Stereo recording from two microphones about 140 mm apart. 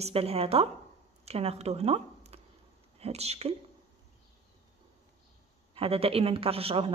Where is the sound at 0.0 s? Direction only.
45° right (ahead or behind).